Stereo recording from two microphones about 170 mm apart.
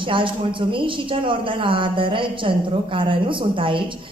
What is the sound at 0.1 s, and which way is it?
A woman's voice, 30° right (ahead or behind).